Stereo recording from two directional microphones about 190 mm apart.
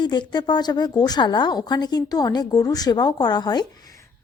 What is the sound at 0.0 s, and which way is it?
A woman's voice, 25° left (ahead or behind).